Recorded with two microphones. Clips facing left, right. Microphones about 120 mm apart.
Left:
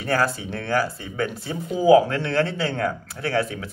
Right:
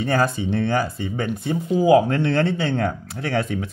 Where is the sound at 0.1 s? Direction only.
20° right (ahead or behind).